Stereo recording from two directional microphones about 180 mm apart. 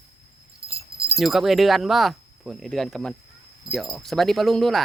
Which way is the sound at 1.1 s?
Centre (ahead or behind).